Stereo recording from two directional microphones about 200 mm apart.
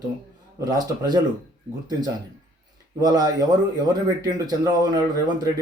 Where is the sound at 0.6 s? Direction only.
20° right (ahead or behind).